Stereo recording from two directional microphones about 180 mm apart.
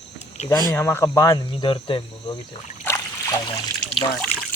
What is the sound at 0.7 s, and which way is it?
Speech, 10° left (ahead or behind).